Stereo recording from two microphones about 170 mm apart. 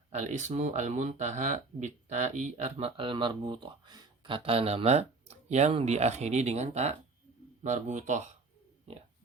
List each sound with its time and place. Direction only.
0.1 s speech: 40° right (ahead or behind)